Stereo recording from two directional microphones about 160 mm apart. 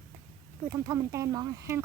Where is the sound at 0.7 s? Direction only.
20° right (ahead or behind).